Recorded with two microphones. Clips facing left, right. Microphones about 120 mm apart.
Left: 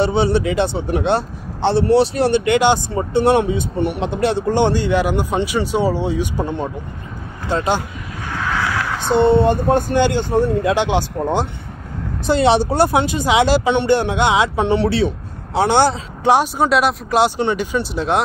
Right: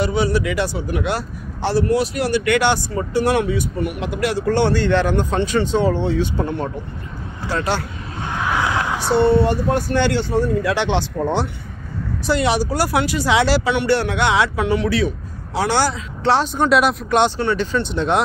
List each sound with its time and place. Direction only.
0.0 s a man's voice: 25° left (ahead or behind)
8.3 s vehicle: 20° right (ahead or behind)
9.1 s a man's voice: 20° left (ahead or behind)
12.3 s a man's voice: 25° left (ahead or behind)
16.6 s speech: centre (ahead or behind)
17.4 s speech: 15° left (ahead or behind)